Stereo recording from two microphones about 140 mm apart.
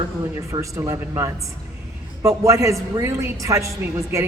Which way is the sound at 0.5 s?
25° right (ahead or behind).